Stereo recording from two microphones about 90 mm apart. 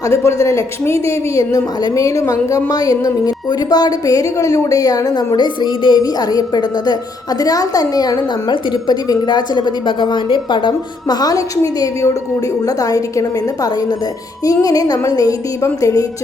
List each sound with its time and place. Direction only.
0.0 s a woman's voice: 30° left (ahead or behind)